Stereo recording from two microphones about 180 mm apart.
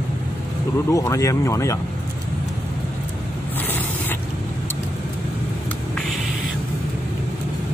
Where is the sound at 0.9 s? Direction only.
15° left (ahead or behind).